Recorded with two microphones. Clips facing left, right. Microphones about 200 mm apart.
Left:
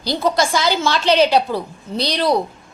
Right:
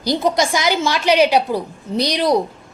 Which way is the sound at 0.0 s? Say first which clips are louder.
Right 1 dB; 15° right (ahead or behind).